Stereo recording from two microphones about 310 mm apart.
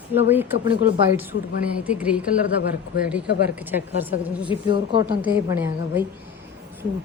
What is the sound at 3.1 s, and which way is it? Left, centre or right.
A woman's voice, centre.